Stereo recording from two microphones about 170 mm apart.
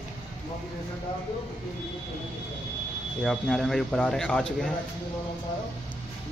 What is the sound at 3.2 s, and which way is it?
Speech, centre (ahead or behind).